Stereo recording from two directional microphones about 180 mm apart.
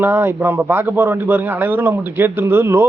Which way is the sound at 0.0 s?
10° right (ahead or behind).